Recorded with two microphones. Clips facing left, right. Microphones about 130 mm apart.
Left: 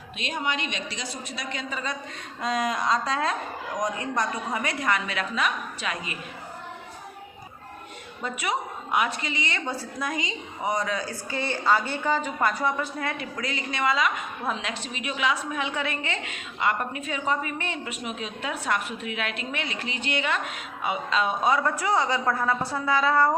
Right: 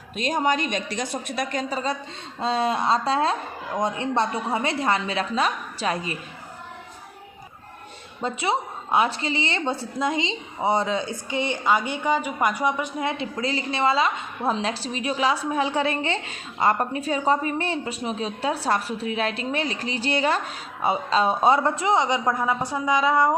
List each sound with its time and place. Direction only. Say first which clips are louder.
0.2 s a woman's voice: right 7 dB; 40° right (ahead or behind)
8.2 s a woman's voice: right 4 dB; 30° right (ahead or behind)